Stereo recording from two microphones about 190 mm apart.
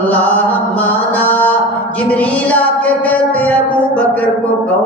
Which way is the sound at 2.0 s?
5° left (ahead or behind).